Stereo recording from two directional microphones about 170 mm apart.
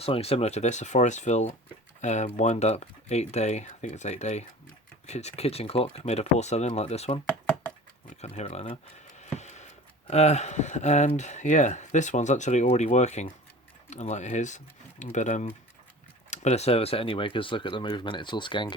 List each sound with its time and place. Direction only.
0.0 s speech: 35° left (ahead or behind)
8.2 s speech: 35° left (ahead or behind)
9.3 s a sound: 40° left (ahead or behind)
10.1 s speech: 40° left (ahead or behind)